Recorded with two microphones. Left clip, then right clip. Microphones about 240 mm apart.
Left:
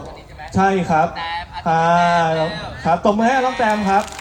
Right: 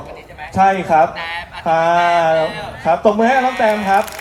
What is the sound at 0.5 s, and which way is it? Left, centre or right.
Speech, left.